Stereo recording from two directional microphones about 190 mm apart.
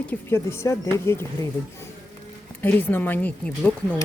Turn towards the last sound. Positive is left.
turn(degrees=5)  # may be behind; listen again after turning